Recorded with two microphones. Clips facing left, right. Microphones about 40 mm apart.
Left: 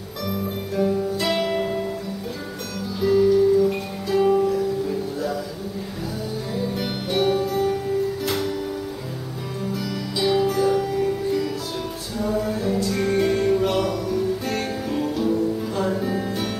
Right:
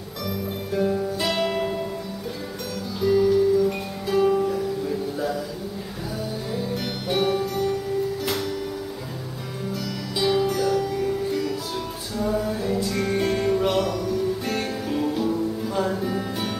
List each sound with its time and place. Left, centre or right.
0.7 s music: centre
1.2 s music: centre
3.0 s music: centre
6.5 s music: centre
9.7 s music: centre
10.6 s music: centre
11.0 s music: centre